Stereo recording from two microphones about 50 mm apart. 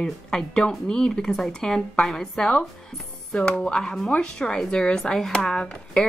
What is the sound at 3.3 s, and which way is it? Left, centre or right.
Speech, centre.